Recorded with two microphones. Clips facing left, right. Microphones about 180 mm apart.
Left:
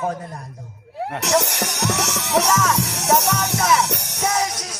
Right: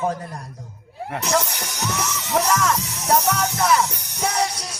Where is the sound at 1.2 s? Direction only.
70° left (ahead or behind).